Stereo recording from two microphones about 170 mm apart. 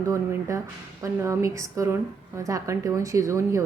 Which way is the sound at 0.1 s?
15° right (ahead or behind).